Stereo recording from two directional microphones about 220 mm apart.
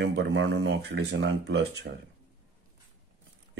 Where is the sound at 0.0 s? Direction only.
55° right (ahead or behind).